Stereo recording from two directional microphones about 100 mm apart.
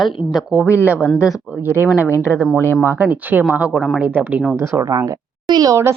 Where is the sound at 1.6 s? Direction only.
20° right (ahead or behind).